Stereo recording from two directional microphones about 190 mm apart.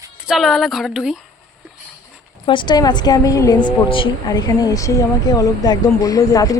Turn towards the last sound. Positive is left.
turn(degrees=20)  # may be behind; listen again after turning